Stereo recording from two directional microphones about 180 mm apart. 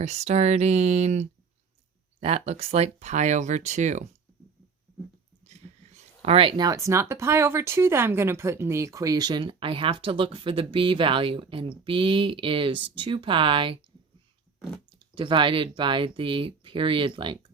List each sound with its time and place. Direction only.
0.0 s speech: 40° right (ahead or behind)
5.5 s a sound: 40° right (ahead or behind)
6.7 s speech: 15° right (ahead or behind)
14.9 s speech: 30° right (ahead or behind)